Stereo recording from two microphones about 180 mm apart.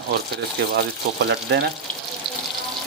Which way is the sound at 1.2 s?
70° right (ahead or behind).